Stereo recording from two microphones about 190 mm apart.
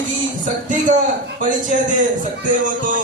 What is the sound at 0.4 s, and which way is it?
A man's voice, 40° right (ahead or behind).